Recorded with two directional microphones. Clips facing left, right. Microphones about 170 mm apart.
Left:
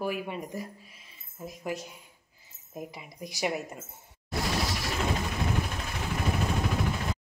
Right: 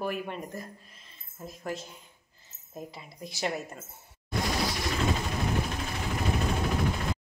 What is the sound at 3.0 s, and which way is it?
Speech, 15° left (ahead or behind).